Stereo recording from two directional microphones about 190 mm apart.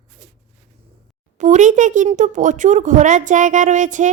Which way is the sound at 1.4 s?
40° right (ahead or behind).